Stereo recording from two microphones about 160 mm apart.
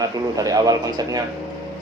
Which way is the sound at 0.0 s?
25° right (ahead or behind).